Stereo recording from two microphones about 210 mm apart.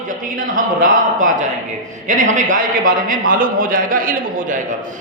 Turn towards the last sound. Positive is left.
turn(degrees=-40)  # may be behind; listen again after turning